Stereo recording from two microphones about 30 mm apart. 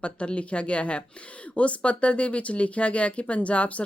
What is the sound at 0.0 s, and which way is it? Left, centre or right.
Speech, left.